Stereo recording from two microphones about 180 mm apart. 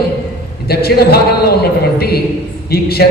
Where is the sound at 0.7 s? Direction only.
60° left (ahead or behind).